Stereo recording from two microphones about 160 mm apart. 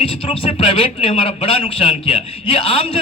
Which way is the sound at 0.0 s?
35° left (ahead or behind).